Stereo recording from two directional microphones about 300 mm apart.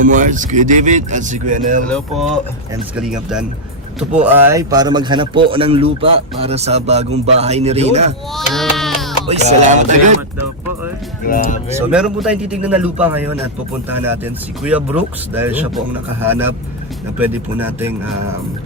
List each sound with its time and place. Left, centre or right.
0.0 s speech: right
1.9 s a man's voice: centre; by 8.1 s right
8.4 s sheep: centre
9.2 s speech: right
11.3 s speech: left
11.8 s a man's voice: centre
14.6 s a man's voice: centre